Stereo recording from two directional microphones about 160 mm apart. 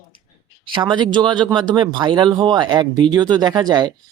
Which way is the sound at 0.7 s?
30° right (ahead or behind).